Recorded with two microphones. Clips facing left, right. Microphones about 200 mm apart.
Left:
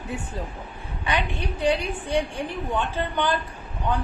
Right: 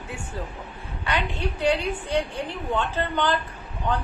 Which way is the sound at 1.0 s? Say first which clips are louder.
Even; 15° left (ahead or behind).